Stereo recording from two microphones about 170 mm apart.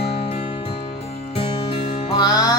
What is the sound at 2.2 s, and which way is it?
Music, 25° left (ahead or behind).